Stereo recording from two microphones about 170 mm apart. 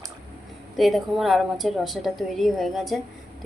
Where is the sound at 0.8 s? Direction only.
Centre (ahead or behind).